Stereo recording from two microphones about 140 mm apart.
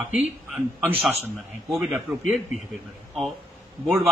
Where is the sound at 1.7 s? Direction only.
Centre (ahead or behind).